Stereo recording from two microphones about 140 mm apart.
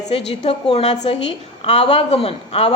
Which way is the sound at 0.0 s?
50° left (ahead or behind).